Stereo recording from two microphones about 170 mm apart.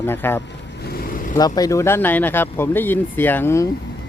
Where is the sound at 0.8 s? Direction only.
65° left (ahead or behind).